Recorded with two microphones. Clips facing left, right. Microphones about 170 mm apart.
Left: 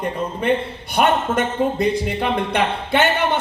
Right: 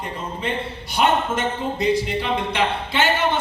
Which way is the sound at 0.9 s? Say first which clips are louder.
Left 2 dB; 55° left (ahead or behind).